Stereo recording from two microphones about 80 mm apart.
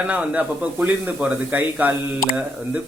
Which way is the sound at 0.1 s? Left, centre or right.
Centre.